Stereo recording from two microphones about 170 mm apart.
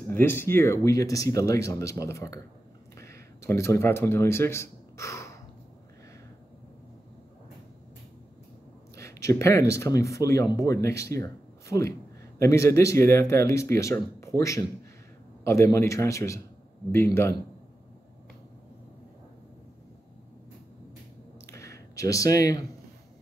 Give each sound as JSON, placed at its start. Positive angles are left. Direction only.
{"t": 0.1, "sound": "a man's voice", "side_deg": 15}
{"t": 8.9, "sound": "speech", "side_deg": 15}
{"t": 21.5, "sound": "a sound", "side_deg": 15}
{"t": 21.9, "sound": "speech", "side_deg": 20}